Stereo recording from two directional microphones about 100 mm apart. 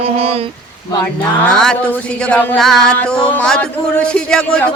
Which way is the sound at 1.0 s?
10° left (ahead or behind).